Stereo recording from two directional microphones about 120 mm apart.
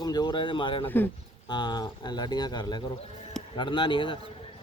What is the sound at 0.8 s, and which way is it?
Speech, 15° left (ahead or behind).